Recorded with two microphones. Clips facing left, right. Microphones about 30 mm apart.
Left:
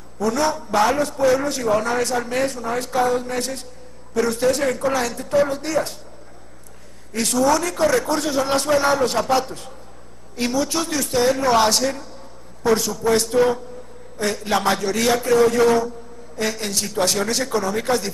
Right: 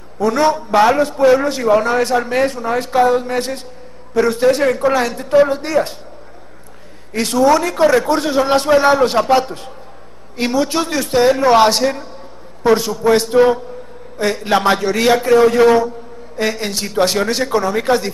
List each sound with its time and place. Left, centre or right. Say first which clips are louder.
0.2 s a man's voice: right 6 dB; right
7.1 s a man's voice: right 5 dB; right